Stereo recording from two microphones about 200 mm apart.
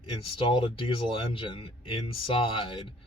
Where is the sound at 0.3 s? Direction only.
25° left (ahead or behind).